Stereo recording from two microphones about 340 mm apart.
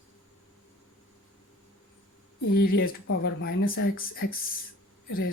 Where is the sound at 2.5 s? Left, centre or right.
Left.